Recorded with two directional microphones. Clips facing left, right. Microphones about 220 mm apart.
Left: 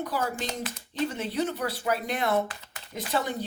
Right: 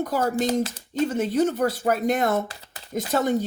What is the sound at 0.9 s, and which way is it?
Speech, 45° right (ahead or behind).